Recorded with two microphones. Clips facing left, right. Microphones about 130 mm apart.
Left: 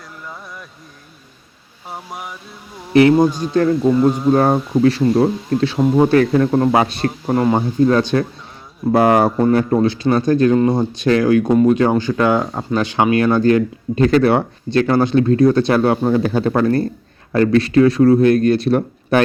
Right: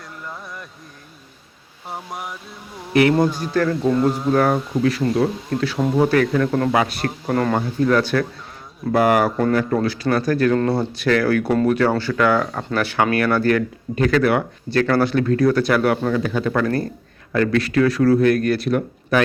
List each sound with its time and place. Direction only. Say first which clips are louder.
1.9 s a sound: even; centre (ahead or behind)
2.9 s speech: left 5 dB; 30° left (ahead or behind)
3.2 s speech: left 4 dB; 15° left (ahead or behind)